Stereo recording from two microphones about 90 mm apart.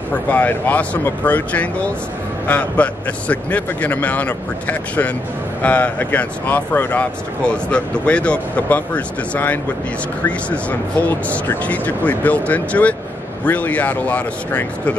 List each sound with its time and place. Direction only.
0.3 s speech: 20° left (ahead or behind)